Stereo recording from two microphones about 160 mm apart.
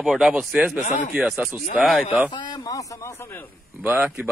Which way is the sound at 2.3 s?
25° left (ahead or behind).